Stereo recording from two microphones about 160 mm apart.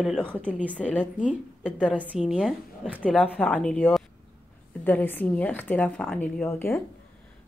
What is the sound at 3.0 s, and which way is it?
Speech, 10° left (ahead or behind).